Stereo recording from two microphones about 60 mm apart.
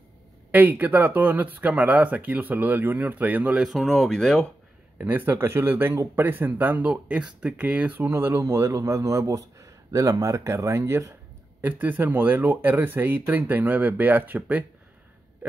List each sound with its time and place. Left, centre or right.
0.5 s speech: right
3.6 s speech: centre
4.9 s speech: right
8.1 s speech: right
8.4 s a man's voice: right
10.4 s speech: right
11.6 s speech: right